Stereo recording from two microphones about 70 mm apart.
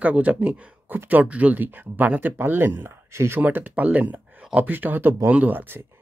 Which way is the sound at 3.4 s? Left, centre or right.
Right.